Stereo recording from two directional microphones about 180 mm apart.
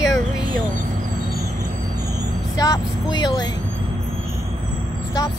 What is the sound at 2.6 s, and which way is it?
Vehicle, 20° left (ahead or behind).